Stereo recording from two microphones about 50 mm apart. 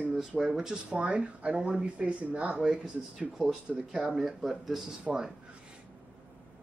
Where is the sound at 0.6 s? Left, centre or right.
Centre.